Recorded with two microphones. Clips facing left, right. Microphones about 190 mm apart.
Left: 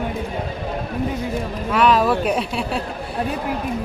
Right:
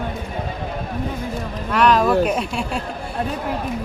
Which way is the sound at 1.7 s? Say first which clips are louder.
Right 1 dB; centre (ahead or behind).